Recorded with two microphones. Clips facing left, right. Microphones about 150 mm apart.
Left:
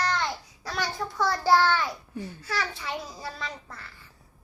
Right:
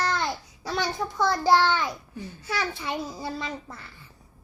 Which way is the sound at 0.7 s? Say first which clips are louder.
Right 3 dB; 20° right (ahead or behind).